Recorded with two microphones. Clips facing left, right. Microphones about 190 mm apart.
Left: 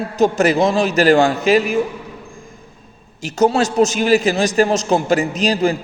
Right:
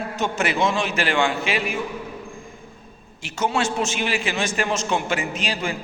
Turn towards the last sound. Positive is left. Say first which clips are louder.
# left 10 dB
turn(degrees=40)  # may be behind; listen again after turning